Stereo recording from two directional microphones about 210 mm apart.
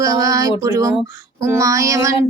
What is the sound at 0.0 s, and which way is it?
Speech, 15° right (ahead or behind).